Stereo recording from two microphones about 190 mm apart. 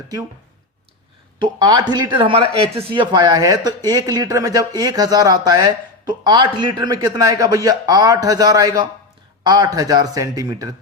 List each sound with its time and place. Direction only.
1.4 s speech: 20° right (ahead or behind)